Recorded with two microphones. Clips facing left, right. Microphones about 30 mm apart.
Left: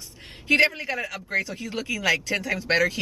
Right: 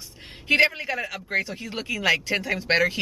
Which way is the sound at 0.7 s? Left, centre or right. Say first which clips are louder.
Right 1 dB; centre.